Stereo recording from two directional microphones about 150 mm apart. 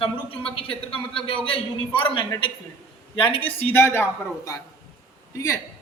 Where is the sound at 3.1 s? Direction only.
35° left (ahead or behind).